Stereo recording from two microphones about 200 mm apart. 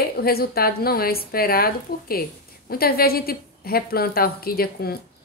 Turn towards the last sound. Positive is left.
turn(degrees=50)  # may be behind; listen again after turning